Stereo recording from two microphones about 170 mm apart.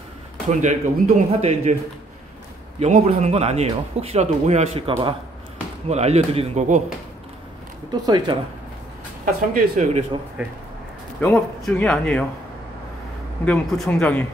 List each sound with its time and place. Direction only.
0.5 s speech: 45° right (ahead or behind)
2.8 s speech: 40° right (ahead or behind)
7.9 s speech: 25° right (ahead or behind)
9.2 s speech: 45° right (ahead or behind)
11.1 s a man's voice: 5° left (ahead or behind)
13.5 s a man's voice: 5° left (ahead or behind)